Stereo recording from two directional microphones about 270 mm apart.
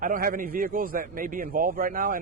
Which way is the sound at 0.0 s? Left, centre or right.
Right.